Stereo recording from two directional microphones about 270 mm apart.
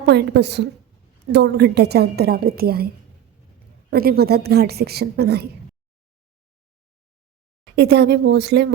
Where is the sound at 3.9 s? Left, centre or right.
Right.